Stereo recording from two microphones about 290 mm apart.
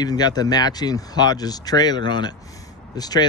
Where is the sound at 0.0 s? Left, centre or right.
Centre.